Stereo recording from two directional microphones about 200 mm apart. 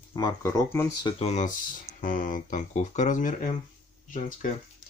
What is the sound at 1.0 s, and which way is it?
Speech, 30° left (ahead or behind).